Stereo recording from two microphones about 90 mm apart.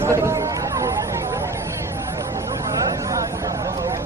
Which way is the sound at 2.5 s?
40° right (ahead or behind).